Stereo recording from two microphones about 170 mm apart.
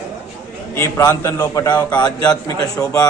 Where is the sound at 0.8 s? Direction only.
15° left (ahead or behind).